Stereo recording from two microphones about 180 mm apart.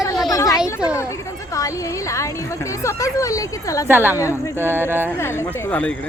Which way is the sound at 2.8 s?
15° left (ahead or behind).